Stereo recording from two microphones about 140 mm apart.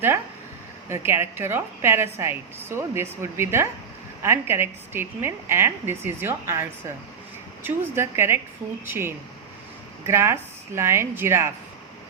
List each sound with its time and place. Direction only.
0.9 s a woman's voice: 20° right (ahead or behind)